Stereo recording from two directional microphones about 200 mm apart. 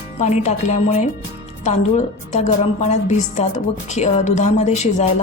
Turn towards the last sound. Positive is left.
turn(degrees=35)  # may be behind; listen again after turning